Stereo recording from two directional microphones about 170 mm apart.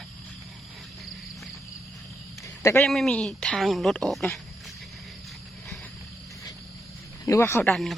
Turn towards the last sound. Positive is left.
turn(degrees=0)  # may be behind; listen again after turning